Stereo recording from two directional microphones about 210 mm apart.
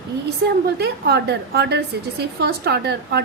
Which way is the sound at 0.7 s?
50° right (ahead or behind).